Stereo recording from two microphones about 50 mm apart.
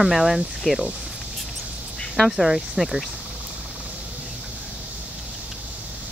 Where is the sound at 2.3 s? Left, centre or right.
Centre.